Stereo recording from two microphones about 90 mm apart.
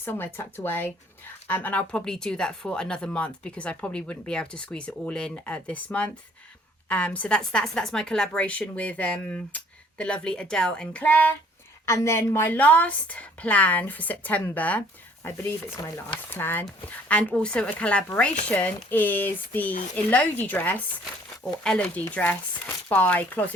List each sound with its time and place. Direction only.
0.0 s speech: 25° left (ahead or behind)
0.3 s chopping: 25° left (ahead or behind)
1.5 s a woman's voice: 20° left (ahead or behind)
11.9 s a woman's voice: 30° left (ahead or behind)
16.1 s chopping: 25° left (ahead or behind)
17.1 s a woman's voice: 15° left (ahead or behind)
21.8 s chopping: 20° left (ahead or behind)